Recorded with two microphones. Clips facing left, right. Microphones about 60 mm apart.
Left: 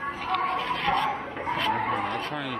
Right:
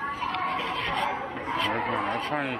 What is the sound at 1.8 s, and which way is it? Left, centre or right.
Speech, centre.